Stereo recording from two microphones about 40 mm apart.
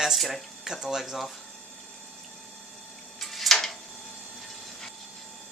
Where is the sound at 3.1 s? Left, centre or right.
Centre.